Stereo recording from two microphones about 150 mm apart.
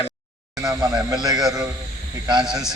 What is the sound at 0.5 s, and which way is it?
Speech, 25° right (ahead or behind).